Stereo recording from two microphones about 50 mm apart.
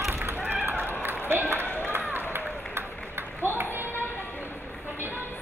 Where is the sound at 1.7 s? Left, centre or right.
Left.